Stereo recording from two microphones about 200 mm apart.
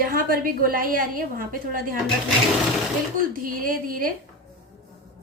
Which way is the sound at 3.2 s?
45° right (ahead or behind).